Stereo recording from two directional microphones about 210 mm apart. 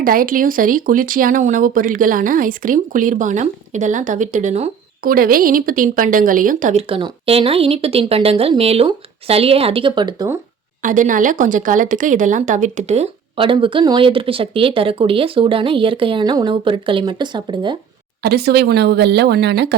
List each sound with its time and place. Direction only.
0.0 s speech: 40° right (ahead or behind)
5.1 s speech: 45° right (ahead or behind)
6.8 s a woman's voice: 25° right (ahead or behind)
10.8 s a woman's voice: 40° right (ahead or behind); by 17.7 s 20° right (ahead or behind)
18.2 s speech: 50° right (ahead or behind)